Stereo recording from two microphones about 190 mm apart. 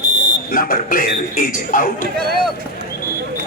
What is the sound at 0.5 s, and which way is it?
A man's voice, 50° left (ahead or behind).